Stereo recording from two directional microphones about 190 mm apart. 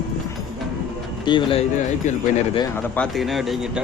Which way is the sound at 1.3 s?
25° left (ahead or behind).